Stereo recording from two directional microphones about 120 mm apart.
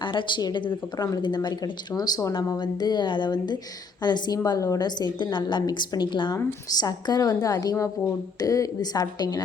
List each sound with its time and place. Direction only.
0.0 s a woman's voice: 40° left (ahead or behind)
0.9 s a woman's voice: 30° left (ahead or behind)